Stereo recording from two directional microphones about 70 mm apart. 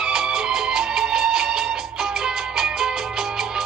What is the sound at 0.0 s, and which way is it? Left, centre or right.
Music, centre.